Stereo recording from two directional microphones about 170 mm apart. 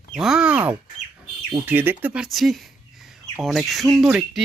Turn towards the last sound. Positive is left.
turn(degrees=-5)  # may be behind; listen again after turning